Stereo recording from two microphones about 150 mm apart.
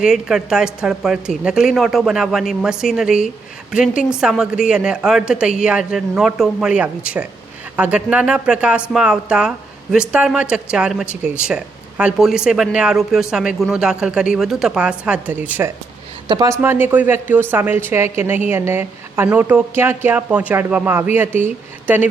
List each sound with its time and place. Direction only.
0.0 s a woman's voice: 5° right (ahead or behind)
16.3 s speech: 25° right (ahead or behind)
16.6 s a woman's voice: 15° right (ahead or behind)